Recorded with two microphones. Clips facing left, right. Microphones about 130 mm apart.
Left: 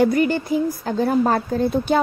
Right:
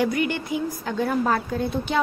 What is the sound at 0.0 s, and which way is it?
A woman's voice, 40° left (ahead or behind).